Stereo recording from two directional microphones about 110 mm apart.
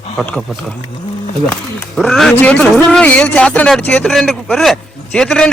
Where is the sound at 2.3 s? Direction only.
15° left (ahead or behind).